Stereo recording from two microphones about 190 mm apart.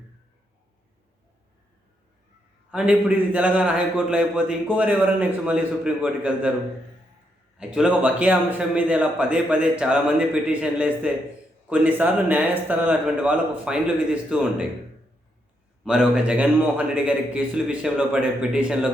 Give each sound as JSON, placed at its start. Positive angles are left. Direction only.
{"t": 2.6, "sound": "a man's voice", "side_deg": -5}
{"t": 7.6, "sound": "a man's voice", "side_deg": -5}
{"t": 15.8, "sound": "a man's voice", "side_deg": -5}